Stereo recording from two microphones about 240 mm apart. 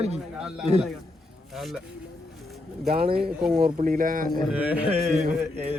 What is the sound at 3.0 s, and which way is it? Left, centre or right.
Speech, right.